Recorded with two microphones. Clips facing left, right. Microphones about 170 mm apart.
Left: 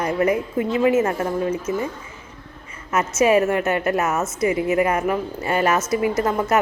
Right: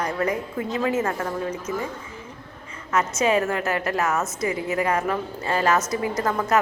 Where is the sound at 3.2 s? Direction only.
20° left (ahead or behind).